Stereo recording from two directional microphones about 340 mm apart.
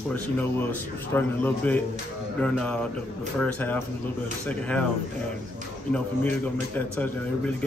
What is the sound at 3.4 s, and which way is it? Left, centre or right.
A man's voice, centre.